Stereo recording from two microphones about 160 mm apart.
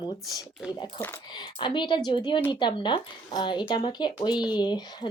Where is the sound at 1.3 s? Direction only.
30° left (ahead or behind).